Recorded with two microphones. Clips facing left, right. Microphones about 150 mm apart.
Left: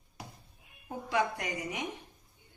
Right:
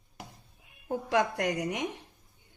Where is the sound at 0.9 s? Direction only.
70° right (ahead or behind).